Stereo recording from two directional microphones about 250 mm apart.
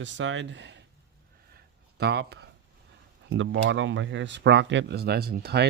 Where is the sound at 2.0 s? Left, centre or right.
Right.